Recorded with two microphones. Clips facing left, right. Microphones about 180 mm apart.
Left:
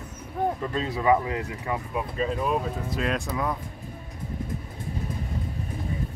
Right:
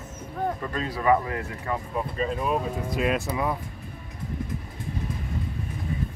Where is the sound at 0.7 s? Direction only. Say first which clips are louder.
Right 1 dB; 20° left (ahead or behind).